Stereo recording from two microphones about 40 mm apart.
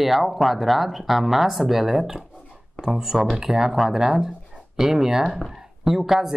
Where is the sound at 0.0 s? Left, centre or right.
Centre.